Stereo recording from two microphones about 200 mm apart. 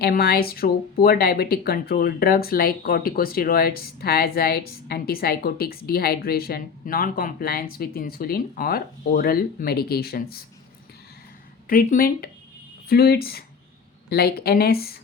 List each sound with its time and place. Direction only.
0.0 s speech: 50° left (ahead or behind)
11.7 s speech: 45° left (ahead or behind)